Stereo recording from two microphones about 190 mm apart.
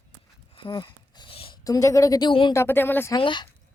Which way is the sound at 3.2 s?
25° left (ahead or behind).